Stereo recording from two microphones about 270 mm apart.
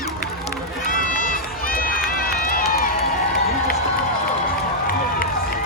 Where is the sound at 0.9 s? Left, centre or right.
Left.